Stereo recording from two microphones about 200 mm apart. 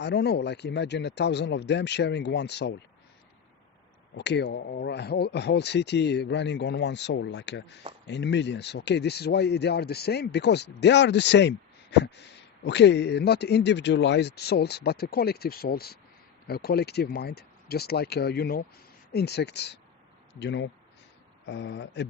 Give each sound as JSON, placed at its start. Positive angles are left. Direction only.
{"t": 0.0, "sound": "speech", "side_deg": 55}
{"t": 4.1, "sound": "speech", "side_deg": 60}